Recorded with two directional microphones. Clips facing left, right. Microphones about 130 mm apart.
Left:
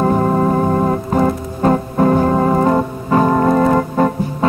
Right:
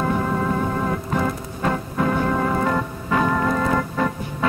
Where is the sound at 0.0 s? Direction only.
40° left (ahead or behind).